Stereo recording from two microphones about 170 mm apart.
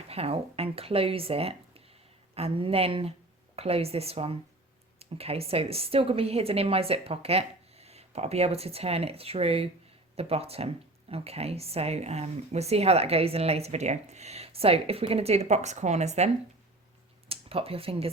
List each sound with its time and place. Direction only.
0.1 s speech: 35° right (ahead or behind)